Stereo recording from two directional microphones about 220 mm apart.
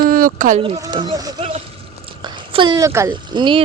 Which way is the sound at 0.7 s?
15° right (ahead or behind).